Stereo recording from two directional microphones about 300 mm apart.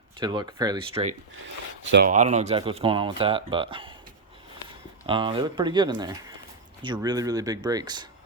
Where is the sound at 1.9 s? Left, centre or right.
Right.